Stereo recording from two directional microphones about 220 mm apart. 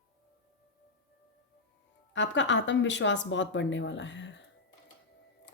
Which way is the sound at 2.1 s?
55° left (ahead or behind).